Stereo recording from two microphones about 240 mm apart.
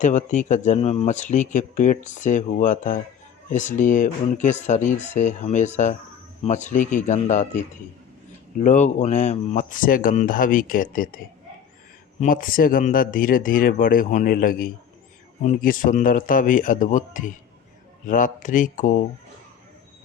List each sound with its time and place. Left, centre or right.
0.0 s speech: left
12.2 s speech: left